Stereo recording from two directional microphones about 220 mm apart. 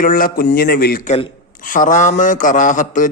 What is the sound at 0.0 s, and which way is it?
A man's voice, 40° left (ahead or behind).